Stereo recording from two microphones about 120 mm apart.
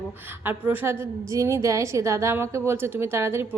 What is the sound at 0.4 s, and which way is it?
A woman's voice, 15° right (ahead or behind).